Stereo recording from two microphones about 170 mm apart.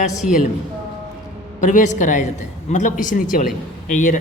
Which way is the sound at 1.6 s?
45° left (ahead or behind).